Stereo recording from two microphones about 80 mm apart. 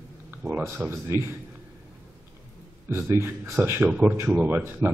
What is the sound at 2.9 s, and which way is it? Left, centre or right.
A man's voice, right.